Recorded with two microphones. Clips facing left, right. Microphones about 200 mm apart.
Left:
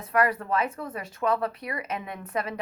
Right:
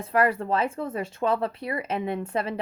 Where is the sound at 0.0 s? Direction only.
25° right (ahead or behind).